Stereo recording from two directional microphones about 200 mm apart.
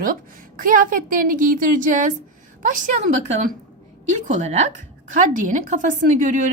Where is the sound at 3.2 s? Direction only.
40° right (ahead or behind).